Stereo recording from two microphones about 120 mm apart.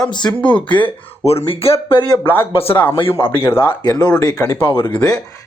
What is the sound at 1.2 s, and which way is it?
Speech, 60° left (ahead or behind).